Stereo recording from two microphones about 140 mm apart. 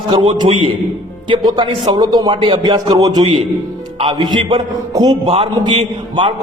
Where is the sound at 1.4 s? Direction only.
35° right (ahead or behind).